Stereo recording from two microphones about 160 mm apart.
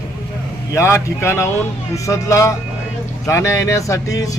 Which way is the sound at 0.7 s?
20° left (ahead or behind).